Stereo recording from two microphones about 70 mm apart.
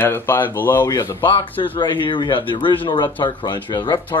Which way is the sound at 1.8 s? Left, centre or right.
Left.